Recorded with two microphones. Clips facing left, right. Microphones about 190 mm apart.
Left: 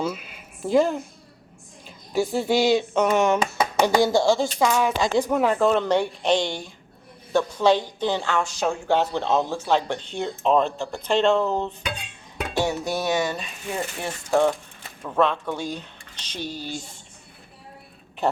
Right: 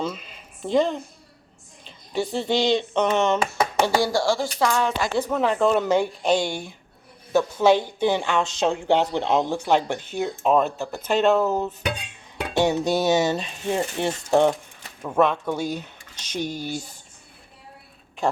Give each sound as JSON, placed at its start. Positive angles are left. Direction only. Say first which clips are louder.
{"t": 0.0, "sound": "speech", "louder": "left 1 dB", "side_deg": 5}
{"t": 4.6, "sound": "speech", "louder": "even", "side_deg": 10}
{"t": 12.5, "sound": "speech", "louder": "right 4 dB", "side_deg": -20}
{"t": 15.0, "sound": "speech", "louder": "right 2 dB", "side_deg": -10}